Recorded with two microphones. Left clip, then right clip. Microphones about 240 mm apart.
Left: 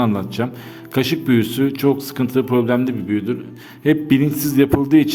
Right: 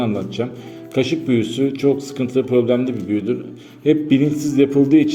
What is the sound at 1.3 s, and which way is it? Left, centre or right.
A man's voice, left.